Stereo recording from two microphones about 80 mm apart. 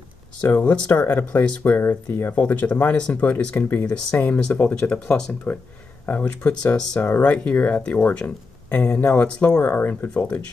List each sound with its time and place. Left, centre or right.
0.4 s speech: left